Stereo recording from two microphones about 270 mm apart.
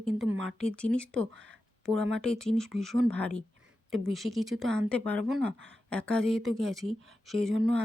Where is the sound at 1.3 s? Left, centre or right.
Right.